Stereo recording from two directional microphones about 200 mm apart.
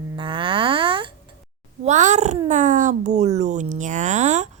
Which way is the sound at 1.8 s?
35° right (ahead or behind).